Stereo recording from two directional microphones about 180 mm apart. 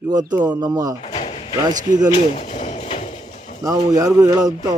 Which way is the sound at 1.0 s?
35° left (ahead or behind).